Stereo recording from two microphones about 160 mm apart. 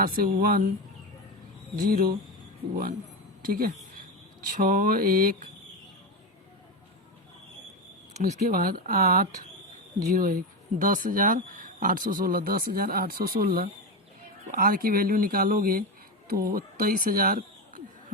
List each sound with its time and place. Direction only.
0.0 s speech: 60° right (ahead or behind)
1.7 s speech: 65° right (ahead or behind)
3.4 s speech: 65° right (ahead or behind)
8.4 s speech: 65° right (ahead or behind)